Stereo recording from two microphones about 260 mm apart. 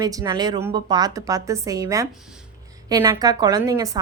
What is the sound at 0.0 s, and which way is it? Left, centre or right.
A woman's voice, centre.